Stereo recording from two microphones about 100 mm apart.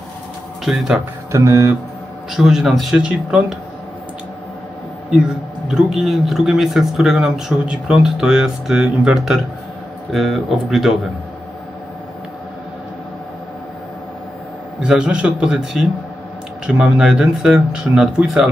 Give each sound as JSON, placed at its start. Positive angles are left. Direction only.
{"t": 0.7, "sound": "a man's voice", "side_deg": -5}
{"t": 1.3, "sound": "speech", "side_deg": -30}
{"t": 2.3, "sound": "a man's voice", "side_deg": -5}
{"t": 5.1, "sound": "a man's voice", "side_deg": -5}
{"t": 14.8, "sound": "speech", "side_deg": -10}